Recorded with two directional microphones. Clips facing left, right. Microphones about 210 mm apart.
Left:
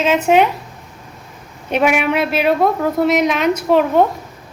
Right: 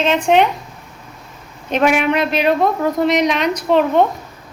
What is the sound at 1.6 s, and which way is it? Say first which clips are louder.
A woman's voice: even; 10° left (ahead or behind).